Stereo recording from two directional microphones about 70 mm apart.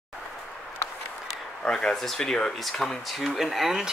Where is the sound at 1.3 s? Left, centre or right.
Centre.